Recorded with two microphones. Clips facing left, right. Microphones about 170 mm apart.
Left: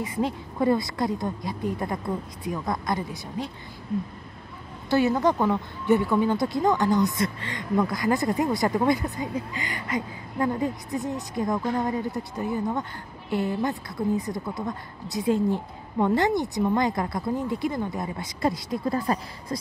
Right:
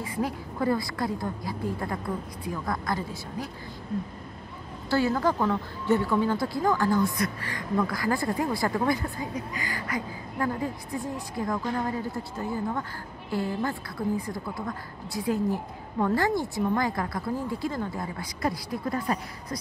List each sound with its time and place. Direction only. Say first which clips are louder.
0.0 s a woman's voice: left 3 dB; 20° left (ahead or behind)
4.8 s a woman's voice: left 3 dB; 20° left (ahead or behind)